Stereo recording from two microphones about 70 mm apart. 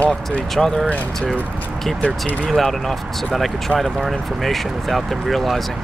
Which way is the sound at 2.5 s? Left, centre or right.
Centre.